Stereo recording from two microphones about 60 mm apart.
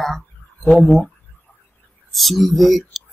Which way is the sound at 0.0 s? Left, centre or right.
Centre.